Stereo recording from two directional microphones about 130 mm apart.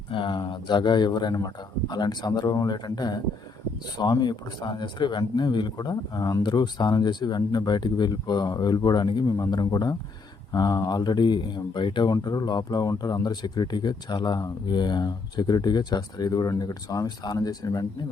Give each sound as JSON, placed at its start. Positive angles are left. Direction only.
{"t": 0.1, "sound": "speech", "side_deg": 40}
{"t": 12.1, "sound": "speech", "side_deg": 30}